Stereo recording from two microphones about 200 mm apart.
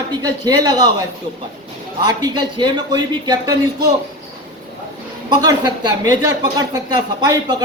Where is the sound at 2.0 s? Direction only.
20° right (ahead or behind).